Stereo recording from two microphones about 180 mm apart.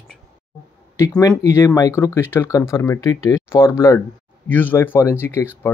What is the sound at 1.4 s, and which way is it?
Speech, 15° left (ahead or behind).